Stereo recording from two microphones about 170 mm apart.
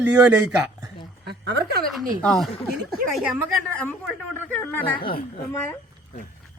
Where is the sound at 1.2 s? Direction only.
75° right (ahead or behind).